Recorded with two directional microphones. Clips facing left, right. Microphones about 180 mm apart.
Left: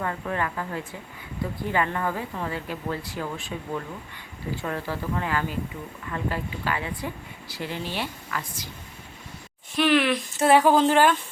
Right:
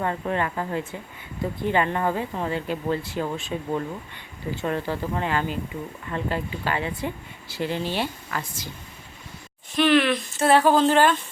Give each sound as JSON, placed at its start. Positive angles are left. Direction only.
{"t": 0.0, "sound": "speech", "side_deg": -25}
{"t": 9.7, "sound": "speech", "side_deg": 10}